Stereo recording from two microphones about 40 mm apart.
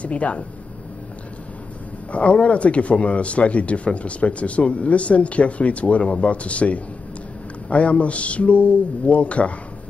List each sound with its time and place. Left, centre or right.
0.0 s speech: left
2.1 s speech: left